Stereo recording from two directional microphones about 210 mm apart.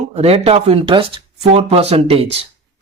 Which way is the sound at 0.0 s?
30° right (ahead or behind).